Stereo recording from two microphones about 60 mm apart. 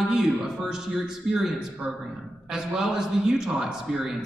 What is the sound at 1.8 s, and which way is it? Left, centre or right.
Speech, right.